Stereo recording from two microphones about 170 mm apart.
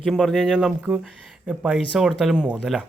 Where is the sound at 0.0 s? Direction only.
Centre (ahead or behind).